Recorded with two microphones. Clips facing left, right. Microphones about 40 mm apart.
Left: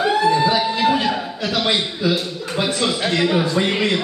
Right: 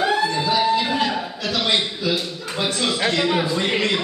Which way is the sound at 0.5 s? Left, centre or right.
Centre.